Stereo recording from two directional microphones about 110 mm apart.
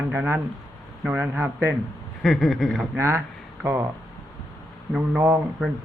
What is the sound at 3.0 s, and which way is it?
Speech, 25° right (ahead or behind).